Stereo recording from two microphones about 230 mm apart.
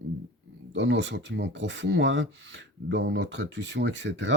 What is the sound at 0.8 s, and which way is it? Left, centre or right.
Speech, right.